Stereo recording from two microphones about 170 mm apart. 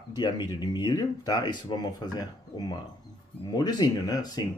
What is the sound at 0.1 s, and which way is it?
Speech, 25° left (ahead or behind).